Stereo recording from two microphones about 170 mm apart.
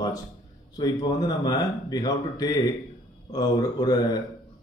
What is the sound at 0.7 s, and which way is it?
Speech, 25° left (ahead or behind).